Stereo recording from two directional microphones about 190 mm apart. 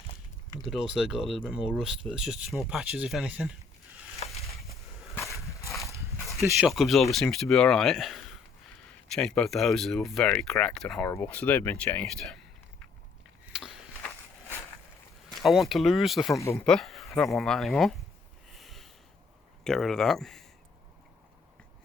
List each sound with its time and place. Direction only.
0.6 s speech: centre (ahead or behind)
5.3 s horse: 15° left (ahead or behind)
6.4 s speech: 5° right (ahead or behind)
13.5 s a sound: centre (ahead or behind)
15.3 s speech: centre (ahead or behind)
16.3 s speech: 15° left (ahead or behind)
16.6 s speech: centre (ahead or behind)
18.5 s a sound: centre (ahead or behind)
19.6 s speech: centre (ahead or behind)